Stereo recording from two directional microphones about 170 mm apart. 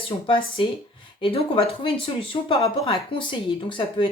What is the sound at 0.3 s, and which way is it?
Speech, 30° left (ahead or behind).